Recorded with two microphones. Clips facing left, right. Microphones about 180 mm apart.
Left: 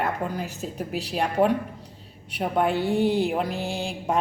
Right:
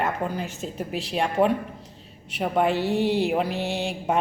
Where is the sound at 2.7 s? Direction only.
55° left (ahead or behind).